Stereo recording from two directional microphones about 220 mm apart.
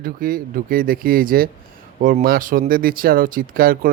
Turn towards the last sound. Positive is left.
turn(degrees=-40)  # may be behind; listen again after turning